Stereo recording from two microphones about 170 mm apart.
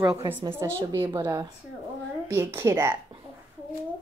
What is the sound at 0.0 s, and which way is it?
A woman's voice, 20° right (ahead or behind).